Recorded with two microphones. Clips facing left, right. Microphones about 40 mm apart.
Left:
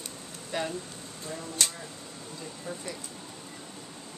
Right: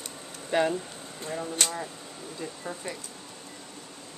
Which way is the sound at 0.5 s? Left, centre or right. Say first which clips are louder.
Right 7 dB; right.